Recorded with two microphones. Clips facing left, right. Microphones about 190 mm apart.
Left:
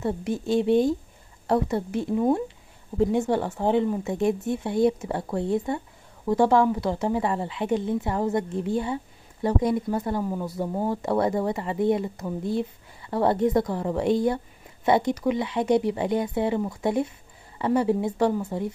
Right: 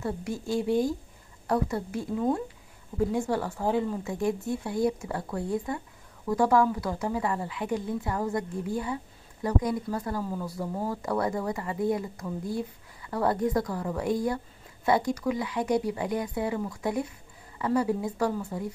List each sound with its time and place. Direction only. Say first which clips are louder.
0.0 s speech: left 5 dB; 25° left (ahead or behind)